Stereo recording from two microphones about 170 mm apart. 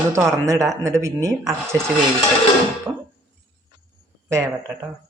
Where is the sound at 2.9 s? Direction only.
20° right (ahead or behind).